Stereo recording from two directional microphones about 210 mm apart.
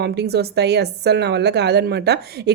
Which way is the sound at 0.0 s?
50° right (ahead or behind).